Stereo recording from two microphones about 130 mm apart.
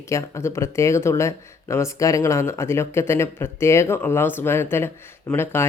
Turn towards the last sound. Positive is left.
turn(degrees=15)  # may be behind; listen again after turning